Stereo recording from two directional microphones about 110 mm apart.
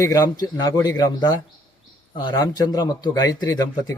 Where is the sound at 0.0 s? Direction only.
35° left (ahead or behind).